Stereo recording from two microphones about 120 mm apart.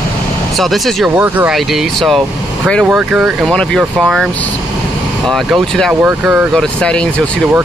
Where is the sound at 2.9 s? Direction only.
10° right (ahead or behind).